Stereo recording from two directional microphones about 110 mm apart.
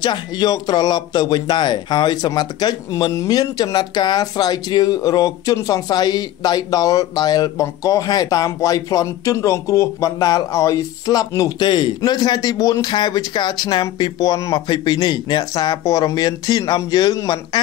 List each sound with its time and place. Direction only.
0.0 s speech: 40° left (ahead or behind)